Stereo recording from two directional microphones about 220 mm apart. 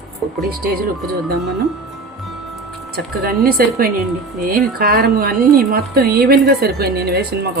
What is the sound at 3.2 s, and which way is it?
Speech, 45° right (ahead or behind).